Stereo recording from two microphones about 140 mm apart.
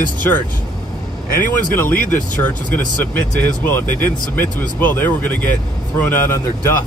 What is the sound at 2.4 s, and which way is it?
Speech, 10° left (ahead or behind).